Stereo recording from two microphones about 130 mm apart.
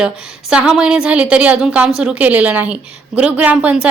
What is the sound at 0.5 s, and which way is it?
A woman's voice, 5° right (ahead or behind).